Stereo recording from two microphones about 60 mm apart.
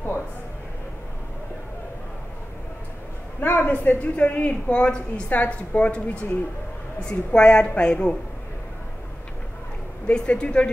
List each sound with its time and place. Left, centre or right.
3.3 s a woman's voice: left; by 8.2 s centre
10.0 s a woman's voice: centre